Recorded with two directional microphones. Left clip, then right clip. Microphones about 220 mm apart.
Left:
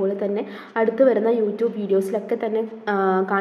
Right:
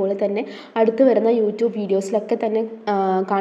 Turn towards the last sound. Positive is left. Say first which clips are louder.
# right 1 dB
turn(degrees=-20)  # may be behind; listen again after turning